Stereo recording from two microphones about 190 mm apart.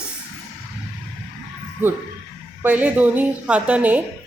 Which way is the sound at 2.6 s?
10° right (ahead or behind).